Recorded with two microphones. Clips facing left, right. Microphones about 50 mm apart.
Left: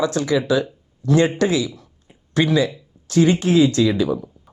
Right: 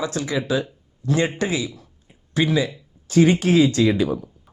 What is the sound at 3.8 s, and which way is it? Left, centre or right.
Speech, right.